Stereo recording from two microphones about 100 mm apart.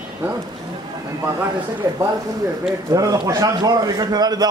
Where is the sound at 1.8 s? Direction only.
35° right (ahead or behind).